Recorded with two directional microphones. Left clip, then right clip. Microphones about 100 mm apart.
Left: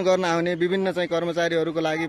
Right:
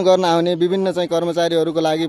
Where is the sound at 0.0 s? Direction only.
35° right (ahead or behind).